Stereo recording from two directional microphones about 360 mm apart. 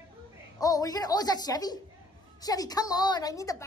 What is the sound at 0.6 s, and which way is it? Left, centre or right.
A woman's voice, centre.